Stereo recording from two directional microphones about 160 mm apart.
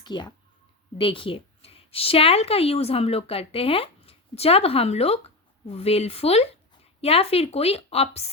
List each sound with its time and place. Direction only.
0.0 s a woman's voice: 25° left (ahead or behind)